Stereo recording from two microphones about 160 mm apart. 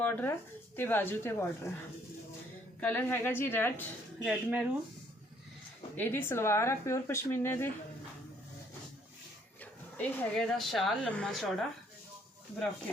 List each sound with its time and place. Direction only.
0.0 s speech: 10° left (ahead or behind)
2.8 s speech: 10° left (ahead or behind)
4.2 s a woman's voice: 5° right (ahead or behind)
6.0 s speech: 15° left (ahead or behind)
10.0 s a woman's voice: 5° left (ahead or behind)